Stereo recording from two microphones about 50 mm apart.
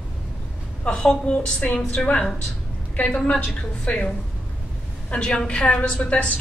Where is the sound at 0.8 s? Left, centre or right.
Centre.